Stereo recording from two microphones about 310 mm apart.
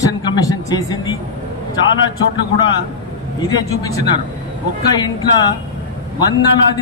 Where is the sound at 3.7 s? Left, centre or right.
Centre.